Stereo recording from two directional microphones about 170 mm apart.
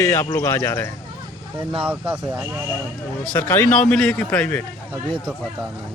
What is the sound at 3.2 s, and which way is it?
A man's voice, 10° left (ahead or behind).